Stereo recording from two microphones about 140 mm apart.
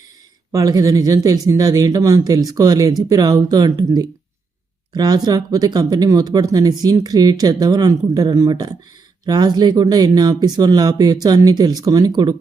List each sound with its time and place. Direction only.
0.5 s speech: 25° right (ahead or behind)